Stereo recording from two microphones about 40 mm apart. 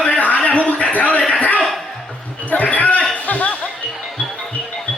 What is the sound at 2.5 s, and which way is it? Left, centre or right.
Basketball bounce, left.